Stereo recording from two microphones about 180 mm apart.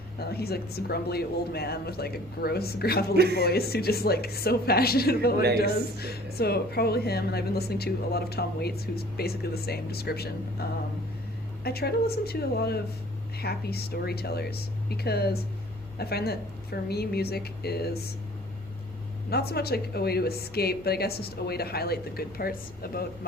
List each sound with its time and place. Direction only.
0.2 s a woman's voice: 60° left (ahead or behind)
19.3 s a woman's voice: 60° left (ahead or behind)